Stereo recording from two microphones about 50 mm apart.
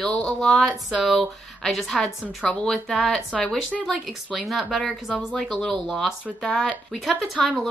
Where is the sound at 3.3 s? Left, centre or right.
Left.